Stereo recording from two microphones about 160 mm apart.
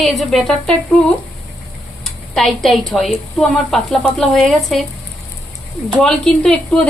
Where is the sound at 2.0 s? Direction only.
Centre (ahead or behind).